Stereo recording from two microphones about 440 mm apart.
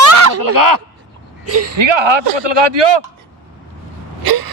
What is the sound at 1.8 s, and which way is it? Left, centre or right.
Speech, right.